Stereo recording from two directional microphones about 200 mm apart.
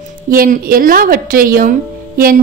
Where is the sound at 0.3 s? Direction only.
45° right (ahead or behind).